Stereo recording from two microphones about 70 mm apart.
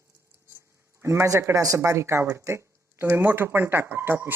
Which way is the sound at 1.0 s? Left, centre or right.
Right.